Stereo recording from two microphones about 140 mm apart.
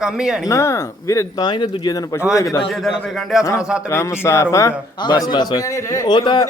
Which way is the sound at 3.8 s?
20° left (ahead or behind).